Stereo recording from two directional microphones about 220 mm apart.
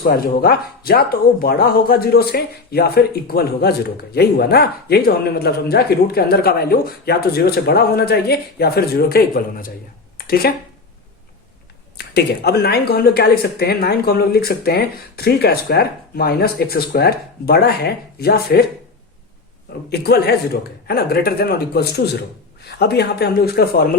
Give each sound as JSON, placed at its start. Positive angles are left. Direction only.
{"t": 0.0, "sound": "speech", "side_deg": 45}
{"t": 10.2, "sound": "a sound", "side_deg": 45}
{"t": 11.9, "sound": "speech", "side_deg": 45}
{"t": 19.9, "sound": "speech", "side_deg": 45}